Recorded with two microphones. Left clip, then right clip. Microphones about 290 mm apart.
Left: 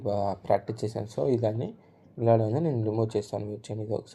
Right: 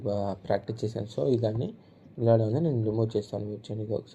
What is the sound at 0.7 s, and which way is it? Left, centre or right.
Speech, left.